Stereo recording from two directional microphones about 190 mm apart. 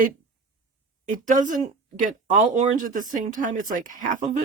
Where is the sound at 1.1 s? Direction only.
40° right (ahead or behind).